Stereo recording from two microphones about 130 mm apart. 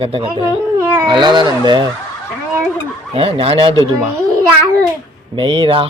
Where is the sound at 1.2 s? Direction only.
35° right (ahead or behind).